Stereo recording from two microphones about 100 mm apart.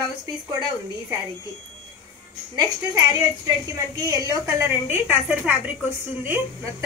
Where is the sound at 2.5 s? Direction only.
40° right (ahead or behind).